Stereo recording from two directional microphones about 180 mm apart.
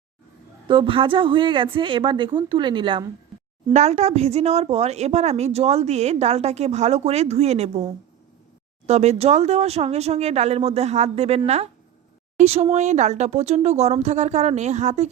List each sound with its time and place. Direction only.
0.7 s a woman's voice: 30° right (ahead or behind)
3.7 s speech: 40° right (ahead or behind)
8.9 s speech: 40° right (ahead or behind)